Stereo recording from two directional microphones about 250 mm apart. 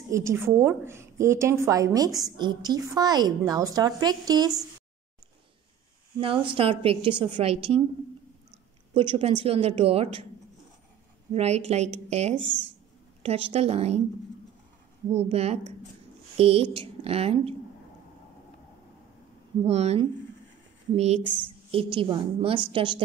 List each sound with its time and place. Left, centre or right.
0.1 s a woman's voice: centre
6.1 s a woman's voice: right
9.4 s a woman's voice: right
11.3 s a woman's voice: right
12.4 s speech: right
13.2 s a woman's voice: right
15.0 s a woman's voice: right
19.6 s a woman's voice: right